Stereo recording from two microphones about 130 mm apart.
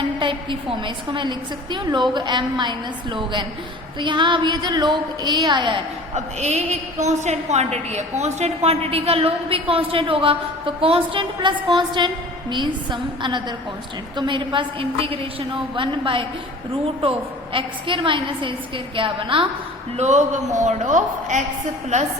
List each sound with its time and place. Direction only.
0.8 s a woman's voice: 40° right (ahead or behind)
6.1 s a woman's voice: 60° right (ahead or behind); by 19.5 s 40° right (ahead or behind)
20.0 s a woman's voice: 65° right (ahead or behind)